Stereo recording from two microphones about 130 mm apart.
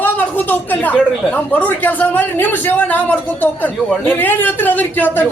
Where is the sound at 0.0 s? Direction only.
15° left (ahead or behind).